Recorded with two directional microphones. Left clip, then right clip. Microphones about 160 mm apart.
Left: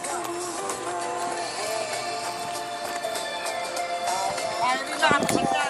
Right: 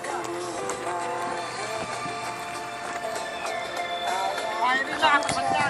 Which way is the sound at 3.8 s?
40° left (ahead or behind).